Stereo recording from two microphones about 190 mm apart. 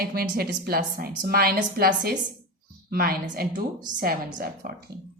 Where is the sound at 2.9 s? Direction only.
50° right (ahead or behind).